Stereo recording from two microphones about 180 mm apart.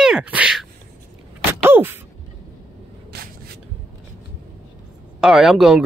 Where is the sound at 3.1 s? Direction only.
65° right (ahead or behind).